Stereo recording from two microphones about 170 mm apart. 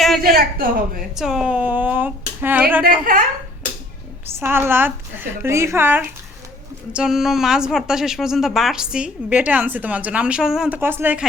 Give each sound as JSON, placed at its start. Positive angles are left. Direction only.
{"t": 0.2, "sound": "a man's voice", "side_deg": -60}
{"t": 1.1, "sound": "a woman's voice", "side_deg": -5}
{"t": 2.8, "sound": "a man's voice", "side_deg": -55}
{"t": 4.4, "sound": "a woman's voice", "side_deg": -15}